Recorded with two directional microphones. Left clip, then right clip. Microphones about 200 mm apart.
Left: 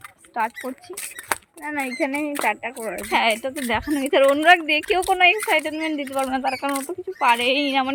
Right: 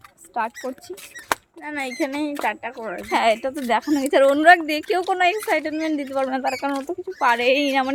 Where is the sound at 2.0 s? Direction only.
10° right (ahead or behind).